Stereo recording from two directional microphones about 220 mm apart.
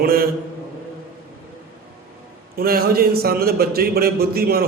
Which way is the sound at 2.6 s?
45° right (ahead or behind).